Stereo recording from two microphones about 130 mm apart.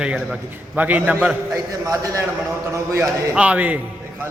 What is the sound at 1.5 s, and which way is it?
Speech, 25° right (ahead or behind).